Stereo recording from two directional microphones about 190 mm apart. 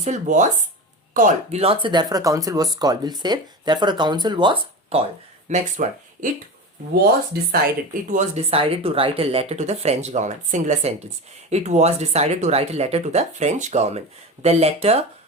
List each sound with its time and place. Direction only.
0.0 s speech: 40° right (ahead or behind)
5.5 s speech: 40° right (ahead or behind)
7.3 s speech: 55° right (ahead or behind)
8.1 s speech: 35° right (ahead or behind)